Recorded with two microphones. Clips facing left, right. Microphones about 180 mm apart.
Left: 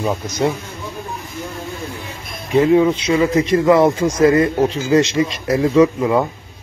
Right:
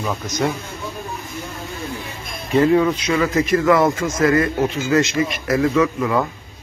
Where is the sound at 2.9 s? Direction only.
25° left (ahead or behind).